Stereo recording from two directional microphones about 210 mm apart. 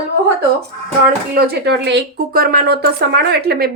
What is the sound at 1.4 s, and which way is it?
Speech, 50° right (ahead or behind).